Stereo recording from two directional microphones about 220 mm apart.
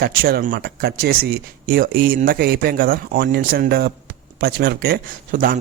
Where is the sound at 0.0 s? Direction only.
45° right (ahead or behind).